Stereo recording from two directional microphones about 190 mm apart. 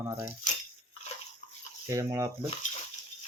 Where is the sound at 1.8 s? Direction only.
15° right (ahead or behind).